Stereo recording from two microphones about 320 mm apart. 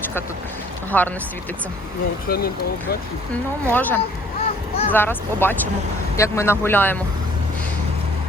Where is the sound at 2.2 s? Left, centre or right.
Left.